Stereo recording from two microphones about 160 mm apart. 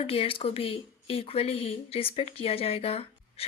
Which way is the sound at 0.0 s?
35° left (ahead or behind).